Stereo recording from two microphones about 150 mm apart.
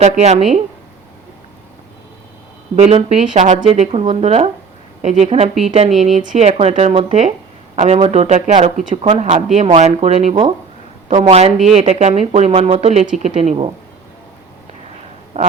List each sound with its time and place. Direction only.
0.0 s speech: 50° right (ahead or behind)
2.7 s speech: 45° right (ahead or behind)
3.7 s speech: 40° right (ahead or behind)
9.0 s speech: 45° right (ahead or behind)
15.3 s speech: 45° right (ahead or behind)